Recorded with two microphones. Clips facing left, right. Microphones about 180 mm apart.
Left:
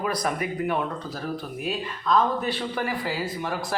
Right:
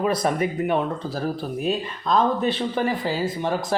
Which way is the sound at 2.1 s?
25° right (ahead or behind).